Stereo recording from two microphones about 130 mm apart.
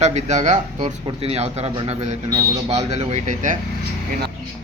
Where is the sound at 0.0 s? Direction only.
60° right (ahead or behind).